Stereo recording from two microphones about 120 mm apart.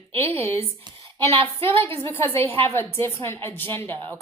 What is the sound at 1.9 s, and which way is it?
A woman's voice, 20° left (ahead or behind).